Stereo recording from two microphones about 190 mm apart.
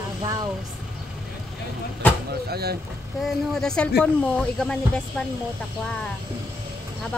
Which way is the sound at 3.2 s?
Centre (ahead or behind).